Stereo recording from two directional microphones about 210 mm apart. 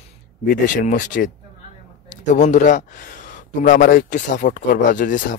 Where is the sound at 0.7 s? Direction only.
40° left (ahead or behind).